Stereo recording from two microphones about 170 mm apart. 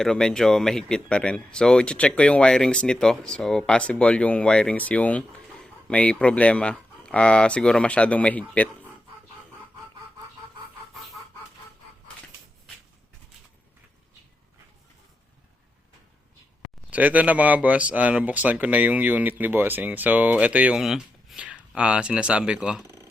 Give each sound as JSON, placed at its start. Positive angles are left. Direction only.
{"t": 0.0, "sound": "speech", "side_deg": 5}
{"t": 16.9, "sound": "speech", "side_deg": -10}
{"t": 22.8, "sound": "a sound", "side_deg": -15}